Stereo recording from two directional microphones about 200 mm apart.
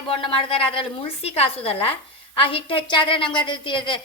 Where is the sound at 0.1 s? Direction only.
25° left (ahead or behind).